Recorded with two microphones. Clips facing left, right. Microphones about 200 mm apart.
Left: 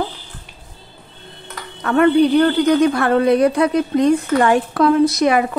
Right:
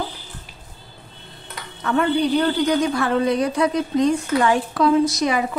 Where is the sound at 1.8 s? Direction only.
60° left (ahead or behind).